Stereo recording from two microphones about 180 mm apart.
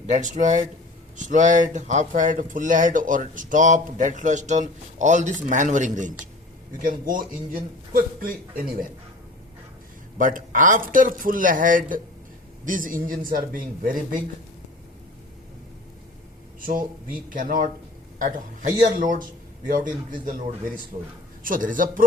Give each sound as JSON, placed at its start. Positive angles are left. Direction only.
{"t": 0.1, "sound": "speech", "side_deg": -45}
{"t": 10.2, "sound": "speech", "side_deg": -45}
{"t": 16.6, "sound": "speech", "side_deg": -50}
{"t": 18.9, "sound": "speech", "side_deg": -50}